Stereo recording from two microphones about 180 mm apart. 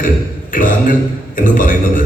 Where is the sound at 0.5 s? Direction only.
50° left (ahead or behind).